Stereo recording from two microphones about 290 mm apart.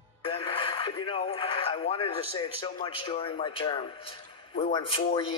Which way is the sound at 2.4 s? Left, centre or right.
Centre.